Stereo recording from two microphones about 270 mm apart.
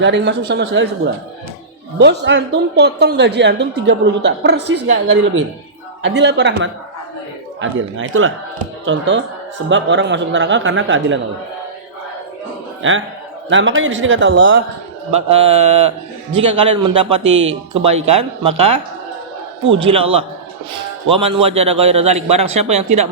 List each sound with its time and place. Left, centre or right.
0.0 s speech: right
2.0 s speech: right
13.5 s speech: right
15.1 s a man's voice: right
16.6 s a man's voice: right
17.2 s a man's voice: right
19.8 s a man's voice: right